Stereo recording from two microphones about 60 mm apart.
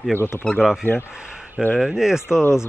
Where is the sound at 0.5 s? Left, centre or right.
Centre.